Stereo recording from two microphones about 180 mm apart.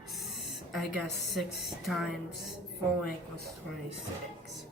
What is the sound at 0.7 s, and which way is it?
A woman's voice, centre (ahead or behind).